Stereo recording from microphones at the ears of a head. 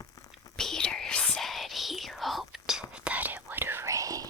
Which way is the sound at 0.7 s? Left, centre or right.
Left.